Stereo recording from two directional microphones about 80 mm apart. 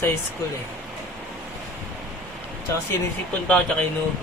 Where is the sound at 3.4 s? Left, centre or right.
Centre.